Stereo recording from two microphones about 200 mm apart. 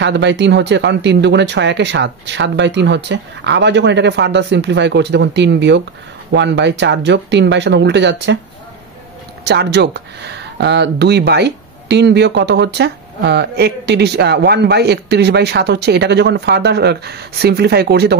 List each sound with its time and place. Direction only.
0.0 s speech: 60° right (ahead or behind)
9.4 s speech: 60° right (ahead or behind)